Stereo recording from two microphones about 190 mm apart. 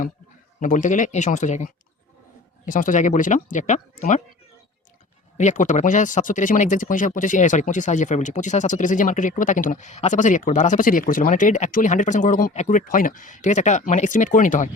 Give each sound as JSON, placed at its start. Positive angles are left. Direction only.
{"t": 0.6, "sound": "speech", "side_deg": 45}
{"t": 5.4, "sound": "speech", "side_deg": 40}